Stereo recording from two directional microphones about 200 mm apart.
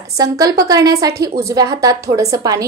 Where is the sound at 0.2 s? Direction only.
15° right (ahead or behind).